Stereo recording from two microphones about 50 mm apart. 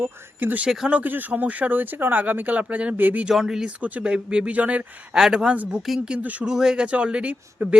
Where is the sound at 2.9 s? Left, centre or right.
Right.